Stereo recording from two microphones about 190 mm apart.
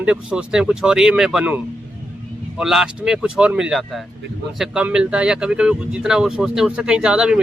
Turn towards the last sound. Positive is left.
turn(degrees=-5)  # may be behind; listen again after turning